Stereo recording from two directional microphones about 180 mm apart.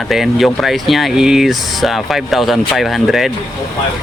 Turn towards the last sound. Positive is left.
turn(degrees=0)  # may be behind; listen again after turning